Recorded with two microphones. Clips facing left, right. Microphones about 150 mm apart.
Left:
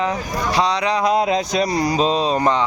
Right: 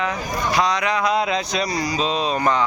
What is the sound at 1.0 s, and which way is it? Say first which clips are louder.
Speech: left 3 dB; 45° left (ahead or behind).